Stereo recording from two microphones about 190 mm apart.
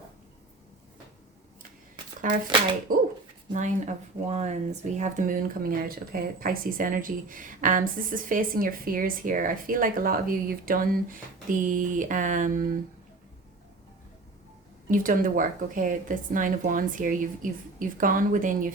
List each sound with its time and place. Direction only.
2.9 s a woman's voice: 45° right (ahead or behind)
14.8 s a woman's voice: 45° right (ahead or behind)